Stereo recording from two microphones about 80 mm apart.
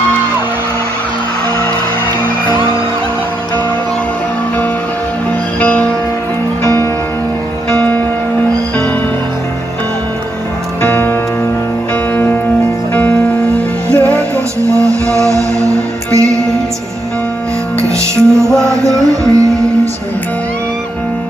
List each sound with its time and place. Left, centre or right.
5.6 s music: centre
10.8 s music: left
12.9 s music: left
14.6 s music: right
17.8 s music: right